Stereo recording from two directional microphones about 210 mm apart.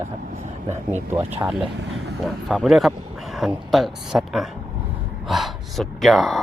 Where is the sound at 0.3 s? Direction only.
35° right (ahead or behind).